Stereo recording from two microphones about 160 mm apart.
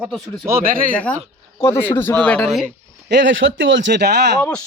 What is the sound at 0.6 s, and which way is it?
Speech, 60° right (ahead or behind).